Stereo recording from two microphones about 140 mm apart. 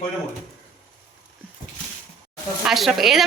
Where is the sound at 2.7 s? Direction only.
Centre (ahead or behind).